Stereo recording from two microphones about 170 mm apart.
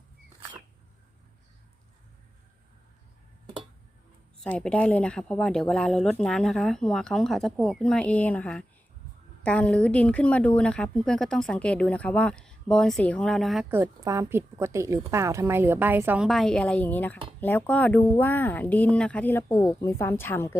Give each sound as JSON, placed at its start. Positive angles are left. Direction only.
{"t": 4.4, "sound": "a woman's voice", "side_deg": 10}
{"t": 13.7, "sound": "a woman's voice", "side_deg": -15}